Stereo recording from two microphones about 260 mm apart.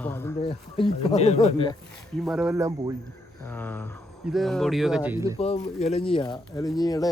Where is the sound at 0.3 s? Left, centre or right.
Left.